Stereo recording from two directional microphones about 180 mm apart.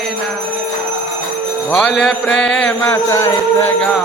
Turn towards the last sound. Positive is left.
turn(degrees=15)  # may be behind; listen again after turning